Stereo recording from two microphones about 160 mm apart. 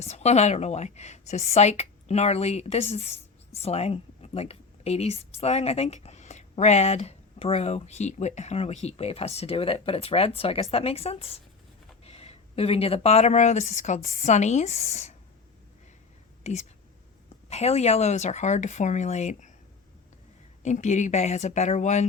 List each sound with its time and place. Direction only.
0.0 s speech: 40° left (ahead or behind)
16.4 s speech: 45° left (ahead or behind)
20.6 s speech: 45° left (ahead or behind)